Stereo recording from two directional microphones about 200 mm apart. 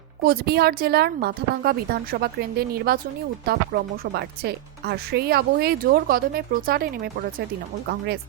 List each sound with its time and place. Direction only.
0.2 s speech: 50° right (ahead or behind)